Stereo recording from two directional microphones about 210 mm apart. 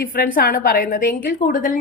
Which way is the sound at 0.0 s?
45° left (ahead or behind).